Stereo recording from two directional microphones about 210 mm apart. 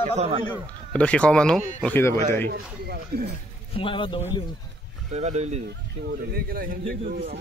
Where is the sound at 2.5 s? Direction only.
50° right (ahead or behind).